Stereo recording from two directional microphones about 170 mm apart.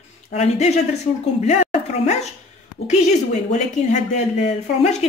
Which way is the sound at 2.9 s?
45° left (ahead or behind).